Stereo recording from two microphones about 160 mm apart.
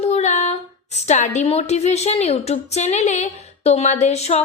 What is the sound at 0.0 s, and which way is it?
A woman's voice, 45° left (ahead or behind).